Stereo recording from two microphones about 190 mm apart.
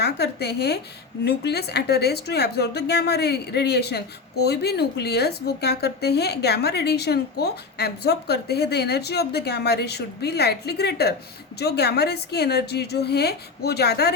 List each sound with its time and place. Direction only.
0.0 s a woman's voice: 60° left (ahead or behind)